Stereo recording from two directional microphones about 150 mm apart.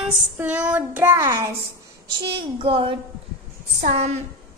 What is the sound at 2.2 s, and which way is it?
Speech, 35° right (ahead or behind).